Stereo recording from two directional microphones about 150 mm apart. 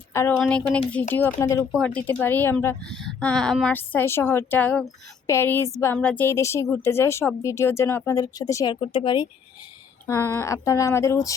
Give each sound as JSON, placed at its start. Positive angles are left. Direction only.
{"t": 0.1, "sound": "a woman's voice", "side_deg": 15}
{"t": 1.7, "sound": "a woman's voice", "side_deg": 5}
{"t": 2.9, "sound": "speech", "side_deg": 0}
{"t": 3.8, "sound": "a woman's voice", "side_deg": 15}
{"t": 8.7, "sound": "speech", "side_deg": 35}
{"t": 10.1, "sound": "speech", "side_deg": 15}